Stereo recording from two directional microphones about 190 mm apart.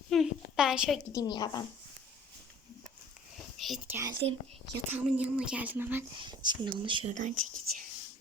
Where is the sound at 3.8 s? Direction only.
10° right (ahead or behind).